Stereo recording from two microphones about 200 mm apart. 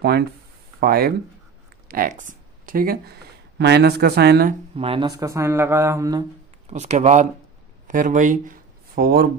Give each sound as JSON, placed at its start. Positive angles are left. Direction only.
{"t": 0.7, "sound": "speech", "side_deg": -50}
{"t": 4.7, "sound": "speech", "side_deg": -25}
{"t": 6.7, "sound": "speech", "side_deg": -35}